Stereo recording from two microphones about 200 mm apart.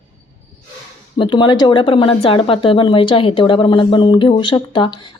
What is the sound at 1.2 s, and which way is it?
Speech, 25° left (ahead or behind).